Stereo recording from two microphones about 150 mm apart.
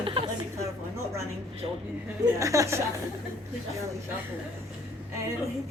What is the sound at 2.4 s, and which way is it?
Speech, 20° right (ahead or behind).